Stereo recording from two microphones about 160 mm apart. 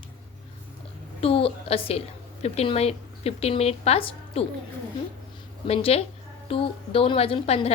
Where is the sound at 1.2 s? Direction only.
35° left (ahead or behind).